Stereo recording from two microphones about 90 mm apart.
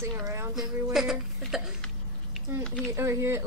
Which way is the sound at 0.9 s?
5° right (ahead or behind).